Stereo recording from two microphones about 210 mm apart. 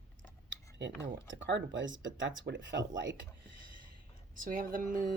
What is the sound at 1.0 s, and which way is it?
Speech, 60° right (ahead or behind).